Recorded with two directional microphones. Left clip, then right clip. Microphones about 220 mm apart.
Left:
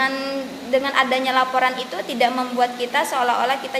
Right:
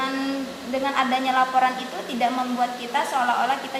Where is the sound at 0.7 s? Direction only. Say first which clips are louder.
Left 4 dB; 45° left (ahead or behind).